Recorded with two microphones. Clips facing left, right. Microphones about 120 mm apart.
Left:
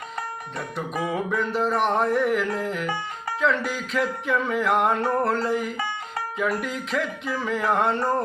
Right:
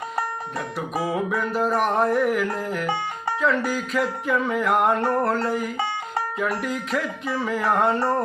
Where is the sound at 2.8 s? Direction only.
25° right (ahead or behind).